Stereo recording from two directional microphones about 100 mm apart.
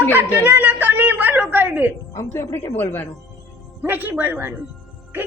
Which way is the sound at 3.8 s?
20° right (ahead or behind).